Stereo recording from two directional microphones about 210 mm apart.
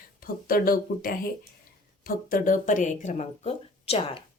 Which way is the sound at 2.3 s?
40° left (ahead or behind).